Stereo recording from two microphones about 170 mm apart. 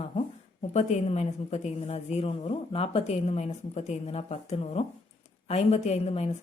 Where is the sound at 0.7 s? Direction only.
40° left (ahead or behind).